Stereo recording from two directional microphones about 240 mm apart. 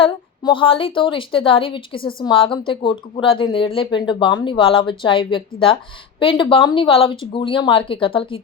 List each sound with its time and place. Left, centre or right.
0.0 s speech: left